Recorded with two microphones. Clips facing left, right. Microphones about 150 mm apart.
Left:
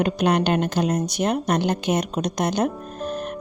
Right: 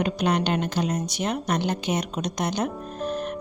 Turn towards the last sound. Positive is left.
turn(degrees=45)  # may be behind; listen again after turning